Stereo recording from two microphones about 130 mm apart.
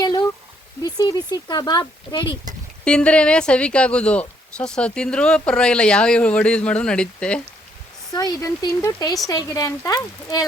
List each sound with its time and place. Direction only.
0.0 s a sound: 35° left (ahead or behind)
0.8 s speech: 30° left (ahead or behind)
2.2 s speech: 30° right (ahead or behind)
2.8 s speech: 10° left (ahead or behind)
8.1 s speech: 30° left (ahead or behind)